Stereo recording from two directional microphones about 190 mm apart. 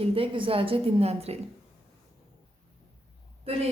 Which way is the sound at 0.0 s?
30° right (ahead or behind).